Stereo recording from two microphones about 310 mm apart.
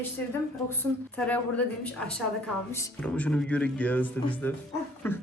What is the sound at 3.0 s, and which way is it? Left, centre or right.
Speech, centre.